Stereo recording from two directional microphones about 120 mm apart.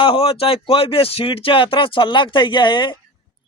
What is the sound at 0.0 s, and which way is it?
A man's voice, 50° left (ahead or behind).